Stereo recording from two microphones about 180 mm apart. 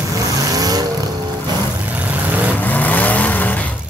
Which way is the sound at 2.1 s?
10° right (ahead or behind).